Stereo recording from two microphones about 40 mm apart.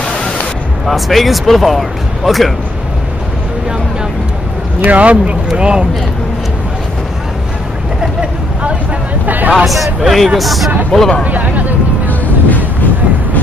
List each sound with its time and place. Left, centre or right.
0.8 s speech: centre
4.8 s speech: right
9.2 s hubbub: right
9.7 s speech: centre
11.2 s speech: right
12.1 s vehicle: left